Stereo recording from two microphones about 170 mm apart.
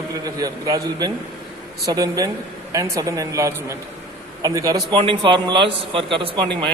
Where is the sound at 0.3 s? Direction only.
20° right (ahead or behind).